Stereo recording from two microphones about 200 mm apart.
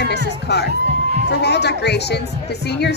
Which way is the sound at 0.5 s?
55° left (ahead or behind).